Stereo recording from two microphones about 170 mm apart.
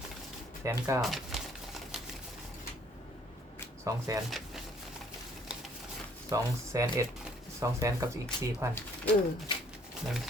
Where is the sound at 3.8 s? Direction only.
20° right (ahead or behind).